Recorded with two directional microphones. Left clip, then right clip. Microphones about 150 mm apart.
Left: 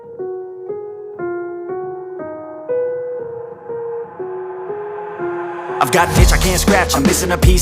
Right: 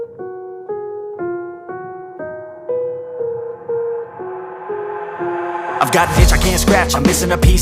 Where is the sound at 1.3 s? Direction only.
90° right.